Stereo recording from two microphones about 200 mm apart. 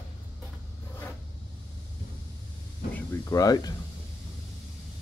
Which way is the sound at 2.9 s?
15° left (ahead or behind).